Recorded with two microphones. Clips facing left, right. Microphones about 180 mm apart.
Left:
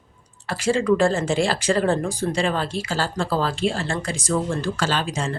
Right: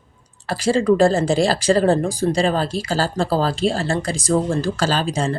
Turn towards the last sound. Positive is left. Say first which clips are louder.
# right 4 dB
turn(degrees=-35)  # may be behind; listen again after turning